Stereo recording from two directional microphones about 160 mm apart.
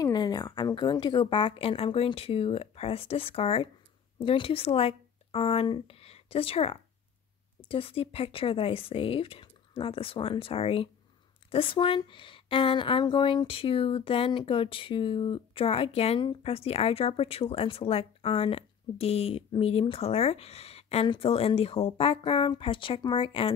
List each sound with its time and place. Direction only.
0.0 s a woman's voice: 25° left (ahead or behind)